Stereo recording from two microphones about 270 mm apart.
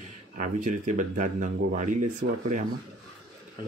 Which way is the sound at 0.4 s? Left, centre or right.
Right.